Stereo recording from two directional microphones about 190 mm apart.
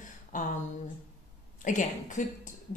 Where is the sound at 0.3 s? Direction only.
45° left (ahead or behind).